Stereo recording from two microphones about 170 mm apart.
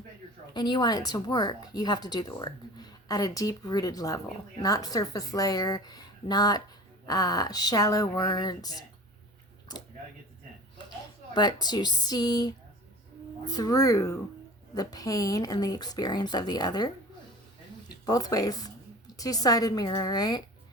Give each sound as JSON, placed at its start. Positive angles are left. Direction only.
{"t": 0.5, "sound": "speech", "side_deg": 25}
{"t": 11.3, "sound": "speech", "side_deg": 25}